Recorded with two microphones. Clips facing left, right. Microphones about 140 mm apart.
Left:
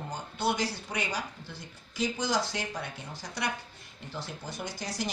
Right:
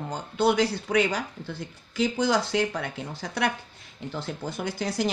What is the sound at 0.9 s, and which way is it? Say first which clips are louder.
Speech: right 10 dB; 65° right (ahead or behind).